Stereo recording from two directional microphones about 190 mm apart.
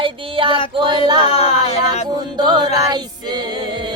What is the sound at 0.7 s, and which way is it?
Child singing, 25° right (ahead or behind).